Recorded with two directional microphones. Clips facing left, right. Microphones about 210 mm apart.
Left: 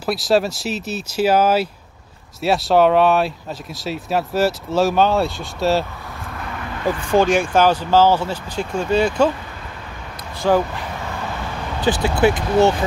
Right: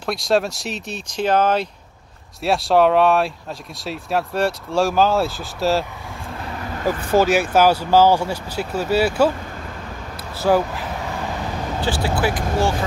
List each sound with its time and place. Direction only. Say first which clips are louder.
0.0 s speech: left 2 dB; 5° left (ahead or behind)
6.5 s vehicle: even; 35° right (ahead or behind)
7.2 s speech: even; 5° right (ahead or behind)
10.4 s speech: even; 5° right (ahead or behind)
11.8 s speech: left 5 dB; 20° left (ahead or behind)